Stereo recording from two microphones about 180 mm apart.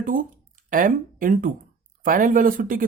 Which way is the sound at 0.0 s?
50° right (ahead or behind).